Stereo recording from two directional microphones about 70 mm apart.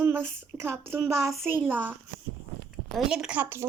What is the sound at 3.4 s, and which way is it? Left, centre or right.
Speech, right.